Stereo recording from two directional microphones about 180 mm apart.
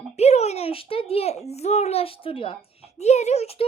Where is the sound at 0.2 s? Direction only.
35° left (ahead or behind).